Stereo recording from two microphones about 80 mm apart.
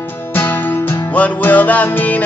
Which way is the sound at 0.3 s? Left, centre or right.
Left.